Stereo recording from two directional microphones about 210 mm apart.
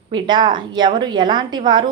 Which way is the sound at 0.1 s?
20° right (ahead or behind).